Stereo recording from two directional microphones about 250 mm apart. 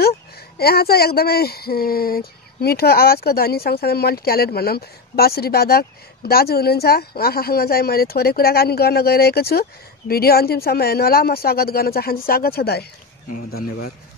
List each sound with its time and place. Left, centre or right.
0.6 s speech: left